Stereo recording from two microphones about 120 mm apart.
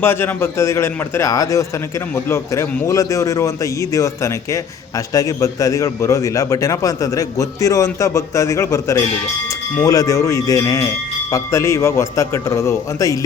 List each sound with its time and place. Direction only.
0.0 s a man's voice: 20° left (ahead or behind)